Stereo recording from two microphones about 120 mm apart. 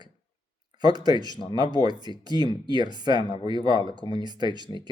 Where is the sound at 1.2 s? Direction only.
35° left (ahead or behind).